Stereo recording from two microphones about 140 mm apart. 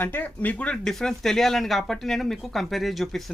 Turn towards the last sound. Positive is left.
turn(degrees=0)  # may be behind; listen again after turning